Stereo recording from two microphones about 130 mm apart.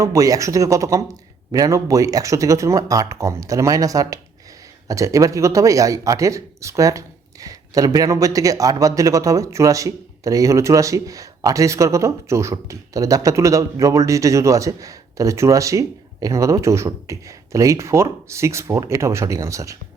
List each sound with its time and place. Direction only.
0.0 s speech: 25° right (ahead or behind)